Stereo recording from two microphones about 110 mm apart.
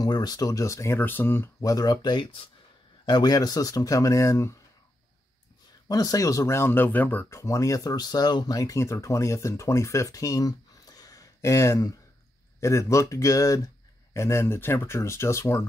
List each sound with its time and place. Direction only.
0.0 s speech: 40° left (ahead or behind)
5.9 s speech: 35° left (ahead or behind); by 7.3 s 15° left (ahead or behind)
7.3 s speech: 30° left (ahead or behind)